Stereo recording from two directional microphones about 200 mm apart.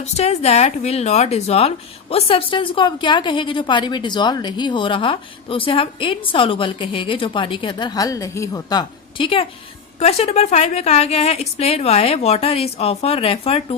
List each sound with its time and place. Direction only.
0.0 s a woman's voice: 30° left (ahead or behind)